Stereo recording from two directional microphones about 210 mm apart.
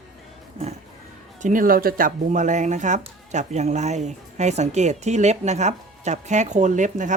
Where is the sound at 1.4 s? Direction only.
40° right (ahead or behind).